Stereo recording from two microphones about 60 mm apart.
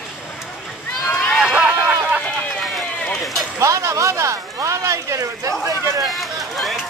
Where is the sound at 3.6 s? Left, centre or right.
Right.